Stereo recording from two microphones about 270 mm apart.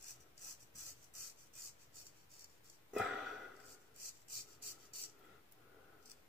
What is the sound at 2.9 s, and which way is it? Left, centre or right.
Sniff, centre.